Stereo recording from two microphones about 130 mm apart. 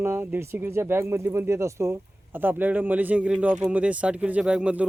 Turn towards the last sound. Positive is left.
turn(degrees=-10)  # may be behind; listen again after turning